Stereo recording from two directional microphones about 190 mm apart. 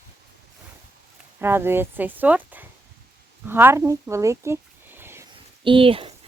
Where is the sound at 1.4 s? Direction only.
10° right (ahead or behind).